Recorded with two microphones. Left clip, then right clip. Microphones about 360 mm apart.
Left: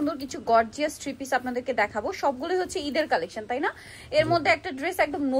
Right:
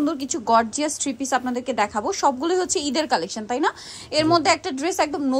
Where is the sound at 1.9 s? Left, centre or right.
Right.